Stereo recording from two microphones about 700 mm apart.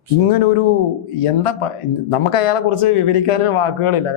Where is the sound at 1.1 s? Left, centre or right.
Left.